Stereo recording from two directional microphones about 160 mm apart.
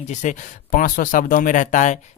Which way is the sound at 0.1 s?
50° left (ahead or behind).